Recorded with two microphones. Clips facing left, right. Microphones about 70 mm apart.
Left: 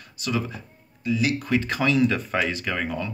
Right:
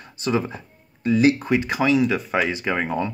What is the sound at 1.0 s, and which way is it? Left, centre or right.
Speech, right.